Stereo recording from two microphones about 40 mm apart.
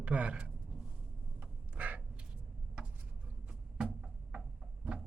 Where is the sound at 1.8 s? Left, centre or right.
Right.